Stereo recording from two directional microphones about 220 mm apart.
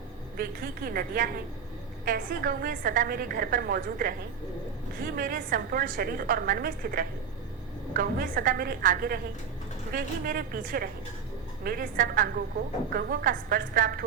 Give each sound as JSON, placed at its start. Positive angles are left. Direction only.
{"t": 0.3, "sound": "a woman's voice", "side_deg": -45}
{"t": 5.1, "sound": "a woman's voice", "side_deg": -40}